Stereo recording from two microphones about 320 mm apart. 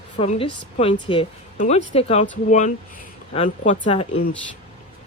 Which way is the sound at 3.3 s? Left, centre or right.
Left.